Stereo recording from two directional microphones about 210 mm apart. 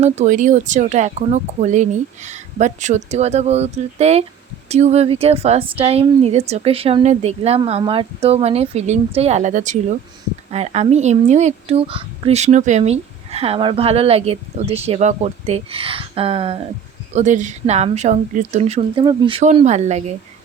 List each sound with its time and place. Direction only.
0.0 s speech: 35° right (ahead or behind)